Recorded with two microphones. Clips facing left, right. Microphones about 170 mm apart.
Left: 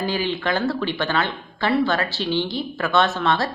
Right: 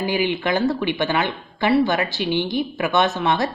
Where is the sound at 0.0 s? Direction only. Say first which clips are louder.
Right 2 dB; 15° right (ahead or behind).